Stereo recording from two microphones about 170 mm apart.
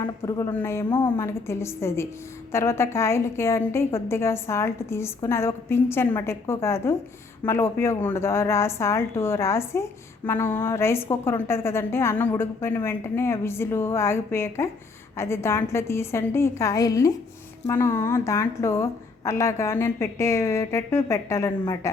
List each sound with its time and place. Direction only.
0.0 s a woman's voice: 20° left (ahead or behind)